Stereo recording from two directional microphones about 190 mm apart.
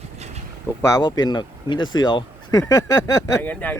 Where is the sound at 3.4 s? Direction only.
10° left (ahead or behind).